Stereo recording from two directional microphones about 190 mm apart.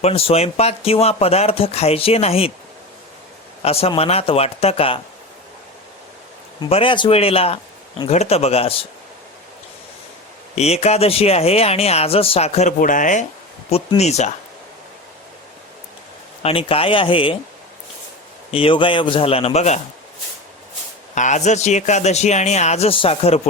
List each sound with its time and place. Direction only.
0.0 s speech: 30° left (ahead or behind)
3.6 s speech: 30° left (ahead or behind)
6.6 s speech: 30° left (ahead or behind)
10.5 s speech: 35° left (ahead or behind)
16.4 s a man's voice: 30° left (ahead or behind)
18.5 s a man's voice: 30° left (ahead or behind)
21.2 s speech: 40° left (ahead or behind)